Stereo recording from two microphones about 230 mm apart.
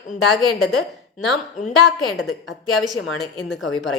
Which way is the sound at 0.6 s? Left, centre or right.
Centre.